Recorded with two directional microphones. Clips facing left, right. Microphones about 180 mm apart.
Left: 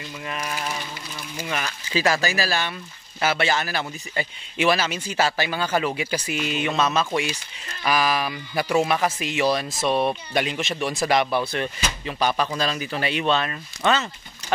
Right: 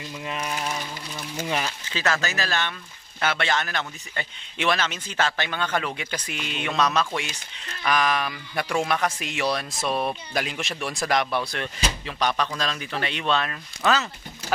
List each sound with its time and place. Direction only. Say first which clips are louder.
1.5 s speech: right 1 dB; 25° right (ahead or behind)
1.9 s a man's voice: left 7 dB; 10° left (ahead or behind)